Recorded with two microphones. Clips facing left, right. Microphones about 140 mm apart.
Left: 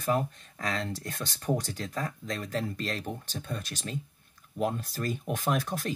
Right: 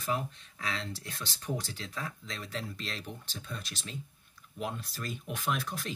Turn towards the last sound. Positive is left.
turn(degrees=45)  # may be behind; listen again after turning